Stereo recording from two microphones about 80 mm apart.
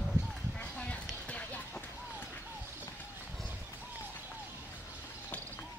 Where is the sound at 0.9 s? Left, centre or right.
Centre.